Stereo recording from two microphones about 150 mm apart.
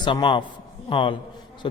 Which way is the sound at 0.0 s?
30° left (ahead or behind).